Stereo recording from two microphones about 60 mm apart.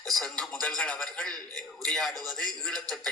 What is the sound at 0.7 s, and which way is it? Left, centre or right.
Speech, left.